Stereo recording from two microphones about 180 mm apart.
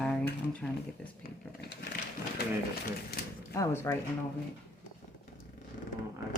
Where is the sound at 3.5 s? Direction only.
15° left (ahead or behind).